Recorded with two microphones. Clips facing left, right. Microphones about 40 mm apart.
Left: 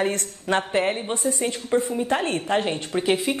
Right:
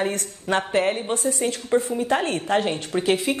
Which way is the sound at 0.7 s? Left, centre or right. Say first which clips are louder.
Right 1 dB; centre.